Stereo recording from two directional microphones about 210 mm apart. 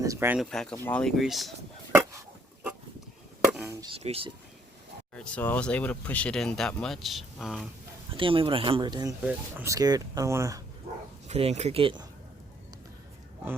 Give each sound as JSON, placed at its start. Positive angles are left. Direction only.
{"t": 0.0, "sound": "speech", "side_deg": -15}
{"t": 0.5, "sound": "speech", "side_deg": 5}
{"t": 3.4, "sound": "chop", "side_deg": -5}
{"t": 3.9, "sound": "speech", "side_deg": -30}
{"t": 5.1, "sound": "speech", "side_deg": 5}
{"t": 8.1, "sound": "speech", "side_deg": -25}
{"t": 11.3, "sound": "speech", "side_deg": -30}